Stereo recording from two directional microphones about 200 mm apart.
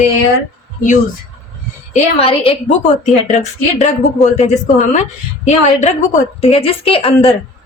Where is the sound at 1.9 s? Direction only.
30° left (ahead or behind).